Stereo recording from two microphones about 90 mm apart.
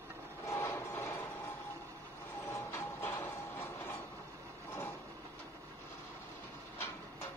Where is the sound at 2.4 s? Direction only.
35° left (ahead or behind).